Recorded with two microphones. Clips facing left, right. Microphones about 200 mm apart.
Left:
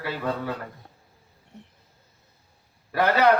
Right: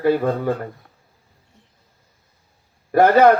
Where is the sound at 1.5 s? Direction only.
65° left (ahead or behind).